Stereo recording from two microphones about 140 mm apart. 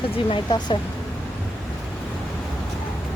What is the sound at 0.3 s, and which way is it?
Speech, 35° left (ahead or behind).